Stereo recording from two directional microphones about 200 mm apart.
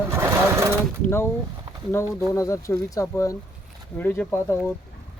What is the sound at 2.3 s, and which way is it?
Speech, 15° left (ahead or behind).